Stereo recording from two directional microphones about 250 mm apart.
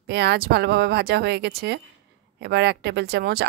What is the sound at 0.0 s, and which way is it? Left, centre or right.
Speech, right.